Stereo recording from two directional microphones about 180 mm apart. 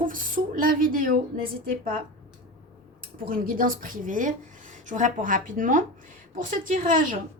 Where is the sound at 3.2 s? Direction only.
50° right (ahead or behind).